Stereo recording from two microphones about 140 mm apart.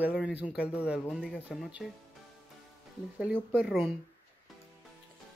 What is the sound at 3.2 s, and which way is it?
Speech, 10° right (ahead or behind).